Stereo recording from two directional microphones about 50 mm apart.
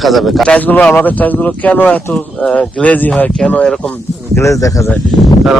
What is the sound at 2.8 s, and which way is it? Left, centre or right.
Speech, left.